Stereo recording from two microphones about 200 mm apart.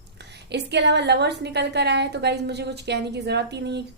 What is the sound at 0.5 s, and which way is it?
A woman's voice, 60° right (ahead or behind).